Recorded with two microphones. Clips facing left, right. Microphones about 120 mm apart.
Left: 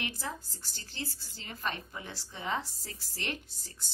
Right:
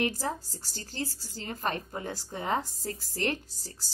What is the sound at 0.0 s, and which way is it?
A woman's voice, 40° right (ahead or behind).